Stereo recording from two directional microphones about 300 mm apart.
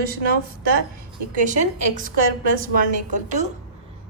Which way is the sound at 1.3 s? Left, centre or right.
Right.